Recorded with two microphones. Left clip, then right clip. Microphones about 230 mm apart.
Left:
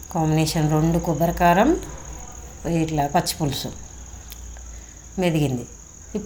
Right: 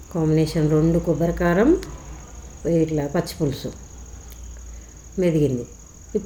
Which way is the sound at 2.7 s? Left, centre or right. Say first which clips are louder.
Even; centre.